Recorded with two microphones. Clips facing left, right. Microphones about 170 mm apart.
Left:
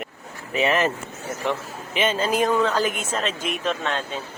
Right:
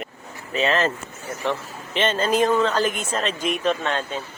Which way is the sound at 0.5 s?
15° left (ahead or behind).